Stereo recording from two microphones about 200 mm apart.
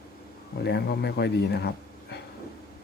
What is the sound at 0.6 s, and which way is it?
Speech, 55° left (ahead or behind).